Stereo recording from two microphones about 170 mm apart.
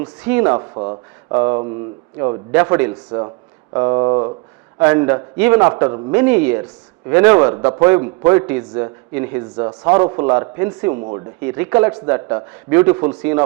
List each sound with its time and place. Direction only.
0.2 s speech: 10° right (ahead or behind)
0.5 s speech: 30° right (ahead or behind)
2.5 s speech: 10° right (ahead or behind)
3.1 s speech: 25° right (ahead or behind)
4.8 s speech: 15° right (ahead or behind)
5.7 s speech: 25° right (ahead or behind)
6.1 s speech: 10° right (ahead or behind)
10.9 s speech: 35° right (ahead or behind)
11.4 s speech: 15° right (ahead or behind)